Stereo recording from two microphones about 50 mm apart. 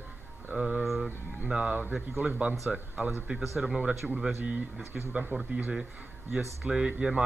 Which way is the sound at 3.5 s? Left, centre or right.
Centre.